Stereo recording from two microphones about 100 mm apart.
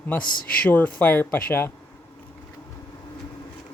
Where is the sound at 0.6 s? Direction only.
15° left (ahead or behind).